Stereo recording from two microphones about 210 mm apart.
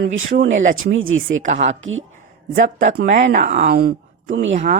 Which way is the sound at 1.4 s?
35° right (ahead or behind).